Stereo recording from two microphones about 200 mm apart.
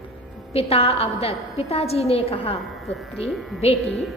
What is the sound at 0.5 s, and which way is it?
A woman's voice, 30° left (ahead or behind).